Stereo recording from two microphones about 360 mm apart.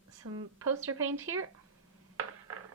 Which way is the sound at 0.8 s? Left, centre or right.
Right.